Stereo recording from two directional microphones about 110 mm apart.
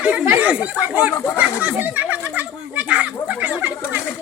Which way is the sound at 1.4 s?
10° right (ahead or behind).